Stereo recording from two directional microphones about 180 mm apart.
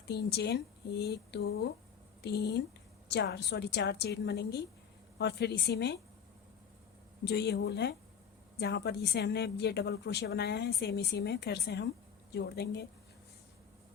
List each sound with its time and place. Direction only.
0.1 s a woman's voice: 65° left (ahead or behind)
7.3 s a woman's voice: 65° left (ahead or behind)